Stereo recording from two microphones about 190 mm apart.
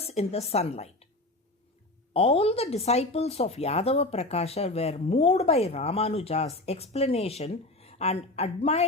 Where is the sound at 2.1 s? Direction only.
30° left (ahead or behind).